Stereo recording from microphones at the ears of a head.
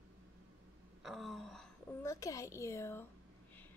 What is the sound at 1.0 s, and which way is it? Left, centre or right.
Sigh, centre.